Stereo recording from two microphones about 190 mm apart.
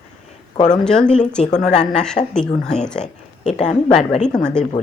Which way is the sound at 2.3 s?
5° left (ahead or behind).